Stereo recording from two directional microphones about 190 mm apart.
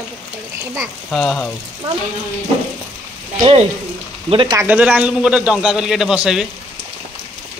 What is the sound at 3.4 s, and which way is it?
Speech, 30° right (ahead or behind).